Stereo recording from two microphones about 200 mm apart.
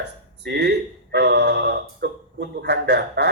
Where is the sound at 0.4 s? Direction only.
55° right (ahead or behind).